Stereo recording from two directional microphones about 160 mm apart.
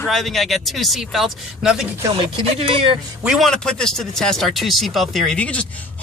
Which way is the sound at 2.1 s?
35° right (ahead or behind).